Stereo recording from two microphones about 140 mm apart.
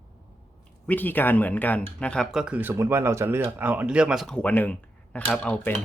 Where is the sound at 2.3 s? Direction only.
5° right (ahead or behind).